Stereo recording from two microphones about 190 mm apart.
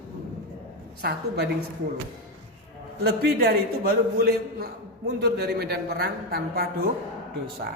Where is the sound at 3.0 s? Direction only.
55° right (ahead or behind).